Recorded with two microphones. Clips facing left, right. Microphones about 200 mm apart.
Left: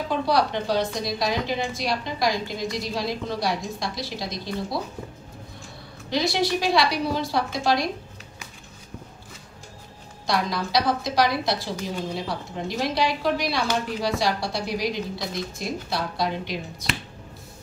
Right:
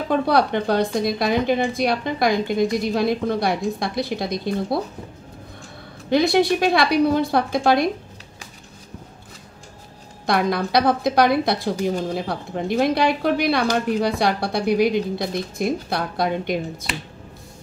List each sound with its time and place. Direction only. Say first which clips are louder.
0.1 s a woman's voice: right 5 dB; 55° right (ahead or behind)
6.0 s a woman's voice: right 7 dB; 55° right (ahead or behind)
10.2 s a woman's voice: right 5 dB; 55° right (ahead or behind)